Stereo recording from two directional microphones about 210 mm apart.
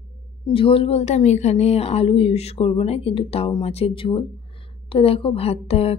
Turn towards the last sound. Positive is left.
turn(degrees=30)  # may be behind; listen again after turning